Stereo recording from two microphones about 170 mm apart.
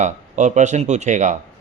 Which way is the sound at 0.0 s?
45° right (ahead or behind).